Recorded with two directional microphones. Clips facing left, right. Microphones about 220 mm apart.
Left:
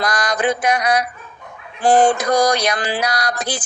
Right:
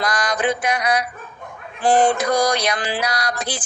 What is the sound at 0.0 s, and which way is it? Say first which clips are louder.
Mantra: left 2 dB; 40° left (ahead or behind).